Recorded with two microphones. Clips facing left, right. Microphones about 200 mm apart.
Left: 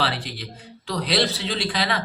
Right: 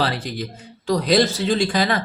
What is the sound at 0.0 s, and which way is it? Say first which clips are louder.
Speech: right 4 dB; 45° right (ahead or behind).